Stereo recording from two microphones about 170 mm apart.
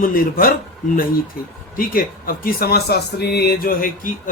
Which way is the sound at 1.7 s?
55° left (ahead or behind).